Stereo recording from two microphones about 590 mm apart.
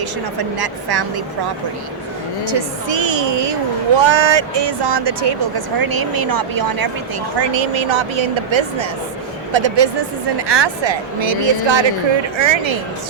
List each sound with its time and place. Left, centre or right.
0.0 s speech: right
2.4 s speech: right
7.3 s speech: right